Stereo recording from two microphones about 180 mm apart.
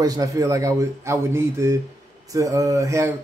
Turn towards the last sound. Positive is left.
turn(degrees=-15)  # may be behind; listen again after turning